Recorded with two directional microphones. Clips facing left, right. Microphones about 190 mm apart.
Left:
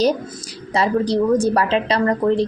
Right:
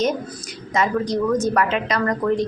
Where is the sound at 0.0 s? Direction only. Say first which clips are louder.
Left 4 dB; 35° left (ahead or behind).